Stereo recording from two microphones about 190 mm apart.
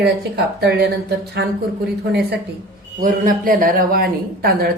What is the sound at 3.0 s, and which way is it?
Speech, 45° right (ahead or behind).